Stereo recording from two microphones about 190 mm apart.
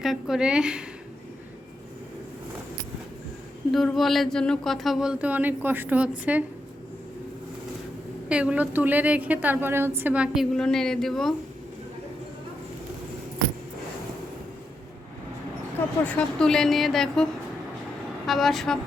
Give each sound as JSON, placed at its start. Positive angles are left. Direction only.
{"t": 0.0, "sound": "speech", "side_deg": 0}
{"t": 3.7, "sound": "speech", "side_deg": 0}
{"t": 8.3, "sound": "a woman's voice", "side_deg": -5}
{"t": 16.0, "sound": "speech", "side_deg": 5}
{"t": 18.3, "sound": "speech", "side_deg": 0}